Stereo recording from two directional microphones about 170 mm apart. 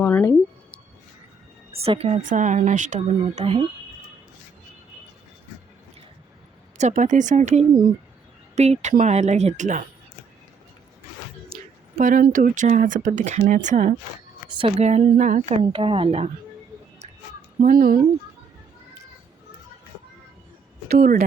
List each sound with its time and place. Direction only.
0.0 s a sound: 15° left (ahead or behind)
1.7 s speech: 35° right (ahead or behind)
6.7 s speech: 45° right (ahead or behind)
11.4 s speech: 55° right (ahead or behind)
14.5 s speech: 35° right (ahead or behind)
17.6 s speech: 55° right (ahead or behind)
20.8 s speech: 55° right (ahead or behind)